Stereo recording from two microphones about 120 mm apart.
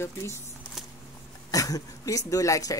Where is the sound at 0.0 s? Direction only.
20° left (ahead or behind).